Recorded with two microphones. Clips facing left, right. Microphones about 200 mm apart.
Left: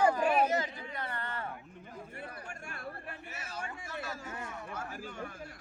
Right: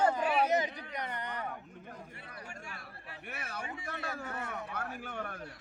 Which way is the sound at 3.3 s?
60° right (ahead or behind).